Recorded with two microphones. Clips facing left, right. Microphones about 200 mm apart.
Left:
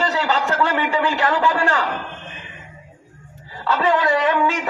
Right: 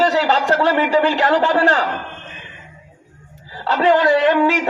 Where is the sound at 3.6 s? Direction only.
35° right (ahead or behind).